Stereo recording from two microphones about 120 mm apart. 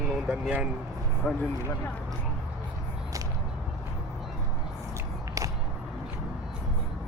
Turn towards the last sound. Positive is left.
turn(degrees=-25)  # may be behind; listen again after turning